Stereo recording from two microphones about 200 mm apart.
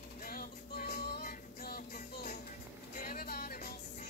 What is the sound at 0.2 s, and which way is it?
Music, 50° left (ahead or behind).